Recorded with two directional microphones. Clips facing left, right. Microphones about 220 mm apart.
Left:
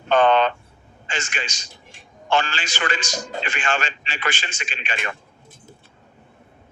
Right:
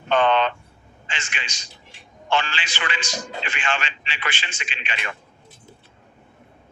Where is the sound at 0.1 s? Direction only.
45° left (ahead or behind).